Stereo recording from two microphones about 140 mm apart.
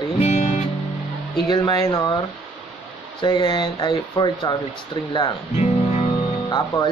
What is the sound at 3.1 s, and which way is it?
Speech, 35° left (ahead or behind).